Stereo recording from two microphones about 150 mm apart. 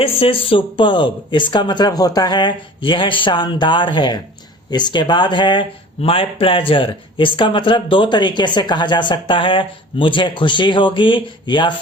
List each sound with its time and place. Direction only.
0.0 s speech: 40° left (ahead or behind)